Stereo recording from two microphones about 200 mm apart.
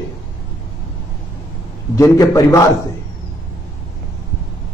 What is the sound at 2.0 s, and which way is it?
Speech, 15° left (ahead or behind).